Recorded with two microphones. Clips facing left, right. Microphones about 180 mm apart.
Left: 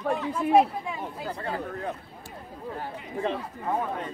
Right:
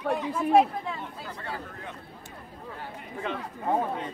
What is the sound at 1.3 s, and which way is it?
Speech, 35° left (ahead or behind).